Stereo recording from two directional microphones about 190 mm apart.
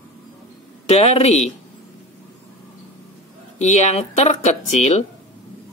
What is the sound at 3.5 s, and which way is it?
Speech, 35° left (ahead or behind).